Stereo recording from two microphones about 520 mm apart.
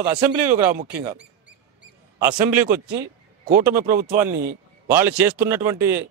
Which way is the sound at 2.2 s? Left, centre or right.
Right.